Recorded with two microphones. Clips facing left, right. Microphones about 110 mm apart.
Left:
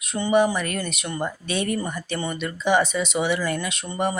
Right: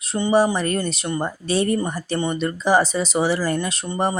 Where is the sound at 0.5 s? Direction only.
30° right (ahead or behind).